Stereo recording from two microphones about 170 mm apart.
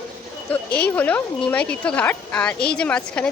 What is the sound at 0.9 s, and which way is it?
Speech, 10° left (ahead or behind).